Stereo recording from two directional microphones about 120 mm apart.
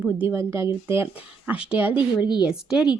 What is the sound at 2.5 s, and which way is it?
Speech, 5° right (ahead or behind).